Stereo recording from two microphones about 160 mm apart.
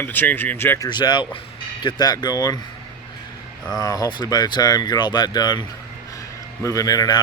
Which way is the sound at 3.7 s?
25° left (ahead or behind).